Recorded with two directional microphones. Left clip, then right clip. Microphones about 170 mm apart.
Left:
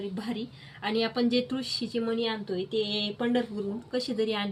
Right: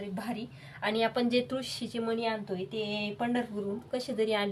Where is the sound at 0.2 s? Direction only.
20° right (ahead or behind).